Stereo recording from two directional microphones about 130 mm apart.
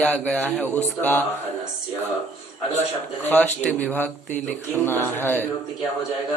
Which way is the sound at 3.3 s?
10° left (ahead or behind).